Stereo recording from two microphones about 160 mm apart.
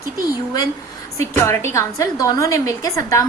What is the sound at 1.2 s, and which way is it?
A woman's voice, 15° left (ahead or behind).